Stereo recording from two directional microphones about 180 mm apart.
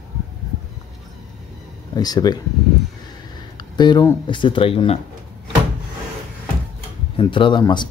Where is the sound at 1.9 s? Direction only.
20° left (ahead or behind).